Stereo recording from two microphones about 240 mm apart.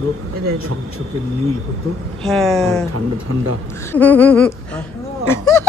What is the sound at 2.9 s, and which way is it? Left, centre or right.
Speech, right.